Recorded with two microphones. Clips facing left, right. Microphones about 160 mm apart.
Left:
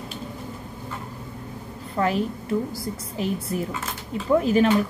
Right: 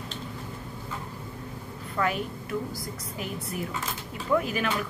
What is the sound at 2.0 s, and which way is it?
A woman's voice, 30° left (ahead or behind).